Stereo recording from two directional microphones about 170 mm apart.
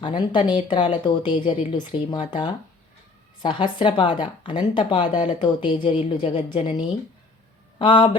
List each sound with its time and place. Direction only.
0.0 s speech: 25° left (ahead or behind)